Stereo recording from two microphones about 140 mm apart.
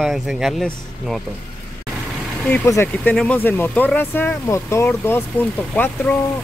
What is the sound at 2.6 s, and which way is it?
Speech, 20° left (ahead or behind).